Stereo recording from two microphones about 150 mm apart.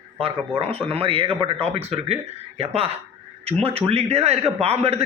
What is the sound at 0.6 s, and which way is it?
A man's voice, 40° right (ahead or behind).